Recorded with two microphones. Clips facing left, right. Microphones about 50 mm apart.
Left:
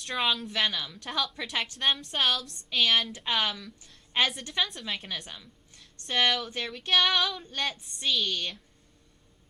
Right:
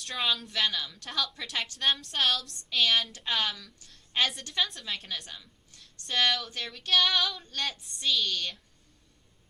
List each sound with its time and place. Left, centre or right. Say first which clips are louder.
0.0 s speech: left 2 dB; centre
0.5 s speech: left 1 dB; centre
3.8 s a sound: left 2 dB; centre
4.6 s a woman's voice: even; centre
6.7 s female singing: left 3 dB; centre
6.9 s female singing: left 1 dB; centre
8.3 s female singing: left 1 dB; centre